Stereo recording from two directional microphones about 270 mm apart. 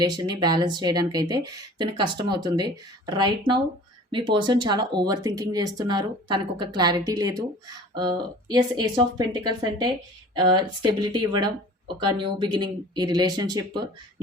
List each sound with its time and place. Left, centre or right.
0.0 s speech: centre